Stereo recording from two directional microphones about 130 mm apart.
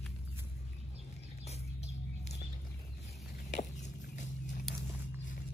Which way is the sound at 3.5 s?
65° left (ahead or behind).